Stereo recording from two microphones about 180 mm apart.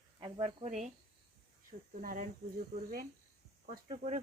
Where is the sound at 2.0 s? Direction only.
45° right (ahead or behind).